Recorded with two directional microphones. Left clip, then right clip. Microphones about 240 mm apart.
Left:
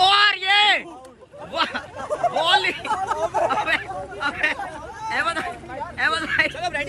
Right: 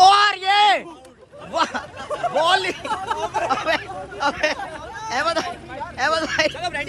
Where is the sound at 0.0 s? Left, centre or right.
Centre.